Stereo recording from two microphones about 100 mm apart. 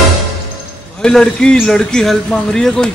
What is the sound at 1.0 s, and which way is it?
Speech, 5° left (ahead or behind).